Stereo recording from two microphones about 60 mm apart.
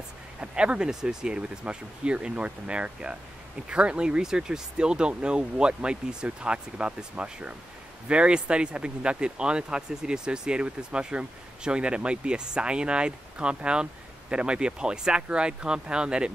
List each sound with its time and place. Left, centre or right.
0.4 s speech: centre